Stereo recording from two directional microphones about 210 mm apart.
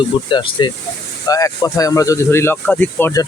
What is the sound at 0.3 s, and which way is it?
Speech, 20° left (ahead or behind).